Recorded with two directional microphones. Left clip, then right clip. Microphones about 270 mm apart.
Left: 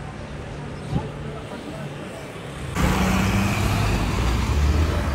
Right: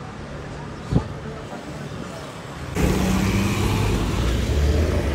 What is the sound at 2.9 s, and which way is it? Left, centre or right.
Vehicle, centre.